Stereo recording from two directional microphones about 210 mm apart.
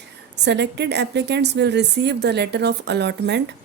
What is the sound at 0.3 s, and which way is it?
A woman's voice, 55° right (ahead or behind).